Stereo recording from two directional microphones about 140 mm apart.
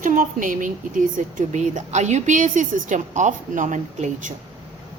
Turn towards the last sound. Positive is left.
turn(degrees=-60)  # may be behind; listen again after turning